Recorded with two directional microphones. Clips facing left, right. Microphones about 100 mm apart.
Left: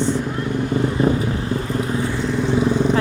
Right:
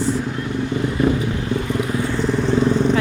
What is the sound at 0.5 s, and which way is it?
Vehicle, 40° left (ahead or behind).